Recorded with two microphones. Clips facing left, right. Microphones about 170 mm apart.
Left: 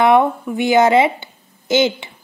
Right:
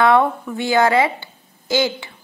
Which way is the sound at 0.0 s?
20° left (ahead or behind).